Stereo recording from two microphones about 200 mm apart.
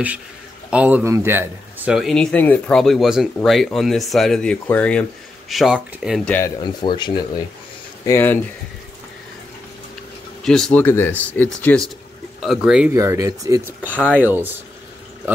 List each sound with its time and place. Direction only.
0.7 s a man's voice: 5° right (ahead or behind)
6.6 s speech: 25° left (ahead or behind)
8.1 s speech: 10° left (ahead or behind)
10.4 s a man's voice: centre (ahead or behind)
12.9 s speech: 15° right (ahead or behind)